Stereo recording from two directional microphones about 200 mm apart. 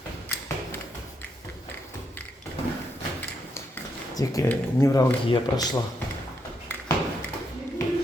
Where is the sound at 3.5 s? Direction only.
15° left (ahead or behind).